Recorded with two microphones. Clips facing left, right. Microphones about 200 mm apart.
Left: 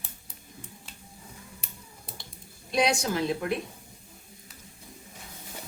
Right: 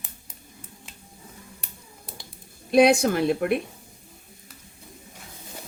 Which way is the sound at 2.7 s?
55° right (ahead or behind).